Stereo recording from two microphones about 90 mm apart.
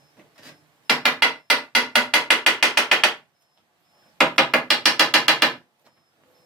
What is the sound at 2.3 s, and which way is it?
Mechanisms, centre (ahead or behind).